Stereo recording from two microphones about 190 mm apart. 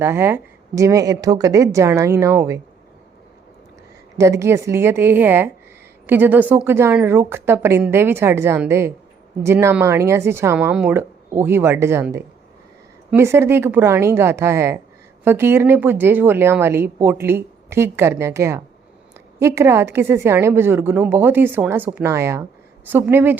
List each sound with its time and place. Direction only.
0.0 s a woman's voice: 10° right (ahead or behind)
4.2 s a woman's voice: 15° right (ahead or behind)